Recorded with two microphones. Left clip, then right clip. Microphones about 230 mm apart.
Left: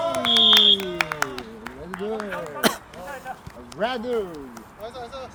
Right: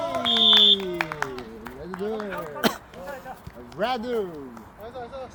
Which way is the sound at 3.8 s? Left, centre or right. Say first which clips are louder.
Left 1 dB; right.